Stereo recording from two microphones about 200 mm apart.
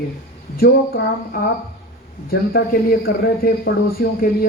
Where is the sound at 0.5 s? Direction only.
50° left (ahead or behind).